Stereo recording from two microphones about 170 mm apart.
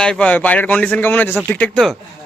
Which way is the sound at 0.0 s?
5° left (ahead or behind).